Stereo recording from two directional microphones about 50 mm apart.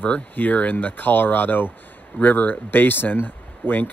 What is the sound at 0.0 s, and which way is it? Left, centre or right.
Speech, left.